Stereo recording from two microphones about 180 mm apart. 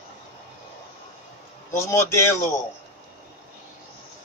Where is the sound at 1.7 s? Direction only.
15° left (ahead or behind).